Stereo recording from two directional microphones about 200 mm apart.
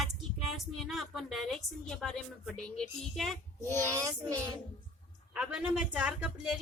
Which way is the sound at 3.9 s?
15° right (ahead or behind).